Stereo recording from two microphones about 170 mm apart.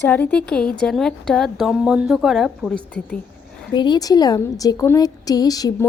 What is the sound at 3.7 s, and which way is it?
A woman's voice, 25° left (ahead or behind).